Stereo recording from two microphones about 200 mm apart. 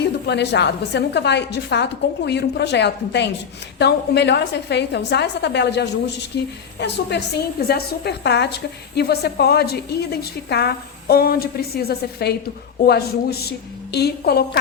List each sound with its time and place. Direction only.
0.0 s a woman's voice: 60° left (ahead or behind)
13.9 s a woman's voice: 55° left (ahead or behind)